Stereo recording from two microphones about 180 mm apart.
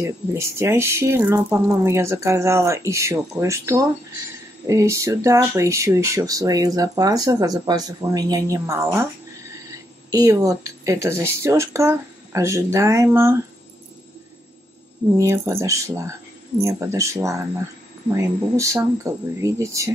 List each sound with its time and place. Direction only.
0.0 s speech: 15° right (ahead or behind)
15.1 s speech: 15° right (ahead or behind)